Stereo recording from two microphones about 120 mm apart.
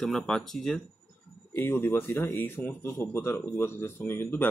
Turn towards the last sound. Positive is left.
turn(degrees=20)  # may be behind; listen again after turning